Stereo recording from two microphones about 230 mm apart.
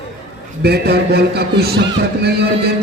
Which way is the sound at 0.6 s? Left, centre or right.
Right.